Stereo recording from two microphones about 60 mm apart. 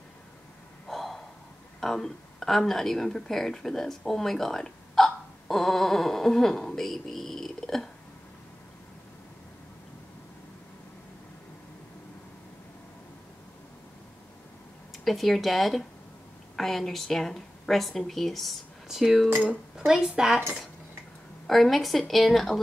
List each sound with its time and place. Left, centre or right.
0.8 s gasp: centre
1.8 s speech: centre
15.0 s speech: centre
19.2 s speech: right
19.8 s a woman's voice: centre
21.5 s speech: centre